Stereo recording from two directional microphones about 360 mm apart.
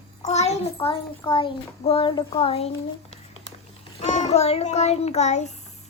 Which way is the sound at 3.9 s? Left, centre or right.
Centre.